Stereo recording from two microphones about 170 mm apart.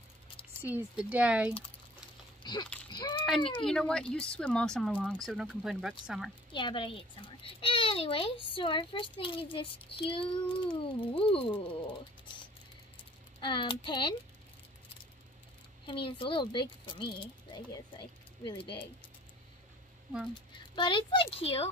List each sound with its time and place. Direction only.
0.6 s speech: 10° right (ahead or behind)
2.4 s speech: 25° left (ahead or behind)
3.6 s speech: 5° left (ahead or behind)
6.5 s a child's voice: 30° left (ahead or behind)
13.4 s speech: 30° left (ahead or behind)
15.9 s speech: 30° left (ahead or behind)
20.7 s a child's voice: 30° left (ahead or behind)